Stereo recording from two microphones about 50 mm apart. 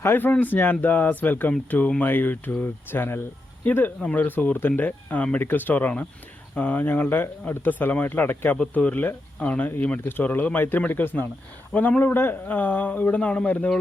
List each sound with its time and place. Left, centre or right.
0.0 s speech: left
0.3 s speech: left
5.4 s speech: left
8.7 s speech: left
10.0 s speech: left
10.8 s speech: left